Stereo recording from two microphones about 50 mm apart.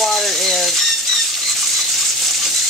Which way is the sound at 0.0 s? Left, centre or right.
Centre.